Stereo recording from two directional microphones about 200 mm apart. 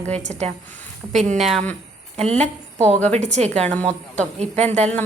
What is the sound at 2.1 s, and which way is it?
A woman's voice, 30° right (ahead or behind).